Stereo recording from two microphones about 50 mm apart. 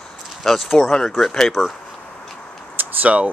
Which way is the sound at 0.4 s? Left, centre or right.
Centre.